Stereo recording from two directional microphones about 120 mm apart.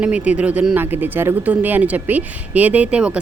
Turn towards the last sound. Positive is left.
turn(degrees=-10)  # may be behind; listen again after turning